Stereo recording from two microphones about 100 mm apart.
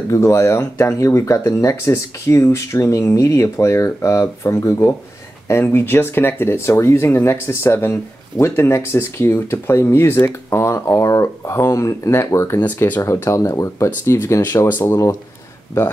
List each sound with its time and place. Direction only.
0.1 s speech: 30° left (ahead or behind)
12.6 s speech: 15° left (ahead or behind)
13.0 s speech: 30° left (ahead or behind)
13.8 s speech: 25° left (ahead or behind)